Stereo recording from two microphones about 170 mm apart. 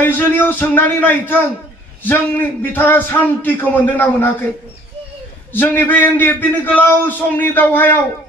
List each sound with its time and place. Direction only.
0.0 s a man's voice: 10° left (ahead or behind)
5.5 s a man's voice: 10° left (ahead or behind)